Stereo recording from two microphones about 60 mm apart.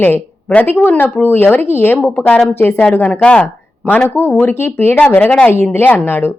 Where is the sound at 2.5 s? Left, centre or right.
Left.